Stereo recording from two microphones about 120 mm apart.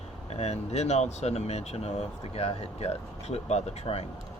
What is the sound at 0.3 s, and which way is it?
Speech, 65° left (ahead or behind).